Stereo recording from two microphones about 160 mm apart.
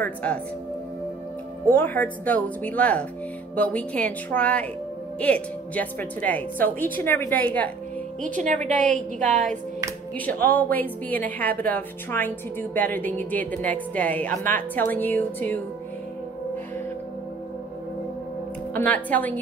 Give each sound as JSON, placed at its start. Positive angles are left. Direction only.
{"t": 0.0, "sound": "speech", "side_deg": 10}
{"t": 1.7, "sound": "a woman's voice", "side_deg": 10}
{"t": 8.2, "sound": "a woman's voice", "side_deg": -50}
{"t": 10.1, "sound": "a woman's voice", "side_deg": 10}
{"t": 18.7, "sound": "a woman's voice", "side_deg": 10}